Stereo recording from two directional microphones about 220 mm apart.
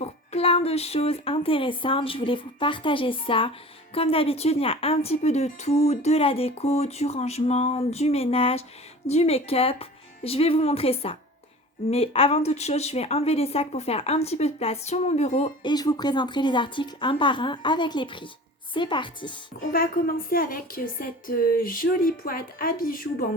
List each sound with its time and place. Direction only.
0.0 s a woman's voice: 25° left (ahead or behind)
15.7 s a woman's voice: 20° left (ahead or behind)
19.7 s a woman's voice: 40° left (ahead or behind)